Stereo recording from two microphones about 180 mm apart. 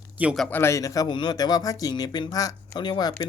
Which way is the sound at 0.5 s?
15° left (ahead or behind).